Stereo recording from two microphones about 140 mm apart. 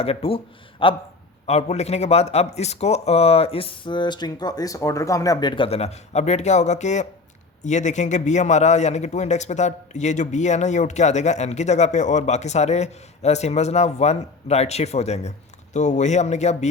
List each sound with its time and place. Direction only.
0.0 s a man's voice: 45° left (ahead or behind)
1.5 s a man's voice: 50° left (ahead or behind)